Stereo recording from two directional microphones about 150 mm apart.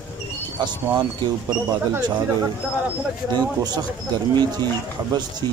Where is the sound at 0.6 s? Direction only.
30° right (ahead or behind).